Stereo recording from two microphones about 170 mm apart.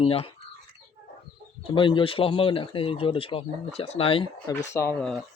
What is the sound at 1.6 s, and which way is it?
Speech, 30° left (ahead or behind).